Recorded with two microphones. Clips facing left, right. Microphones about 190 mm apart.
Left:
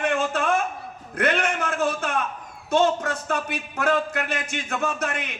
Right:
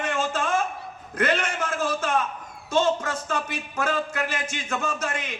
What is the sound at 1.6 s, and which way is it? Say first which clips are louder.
Speech: left 2 dB; 60° left (ahead or behind).